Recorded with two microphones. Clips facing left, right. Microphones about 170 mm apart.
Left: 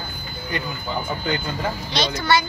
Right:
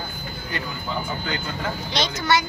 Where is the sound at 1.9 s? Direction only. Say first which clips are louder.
Left 1 dB; 20° right (ahead or behind).